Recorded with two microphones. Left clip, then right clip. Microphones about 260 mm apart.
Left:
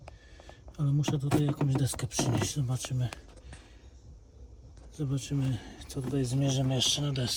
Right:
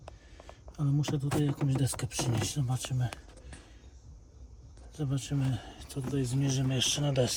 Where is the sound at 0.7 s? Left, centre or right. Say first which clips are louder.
Left 1 dB; centre.